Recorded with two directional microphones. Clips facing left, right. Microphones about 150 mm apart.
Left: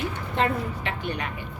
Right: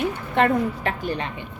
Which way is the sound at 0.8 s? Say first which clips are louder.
Right 4 dB; 40° right (ahead or behind).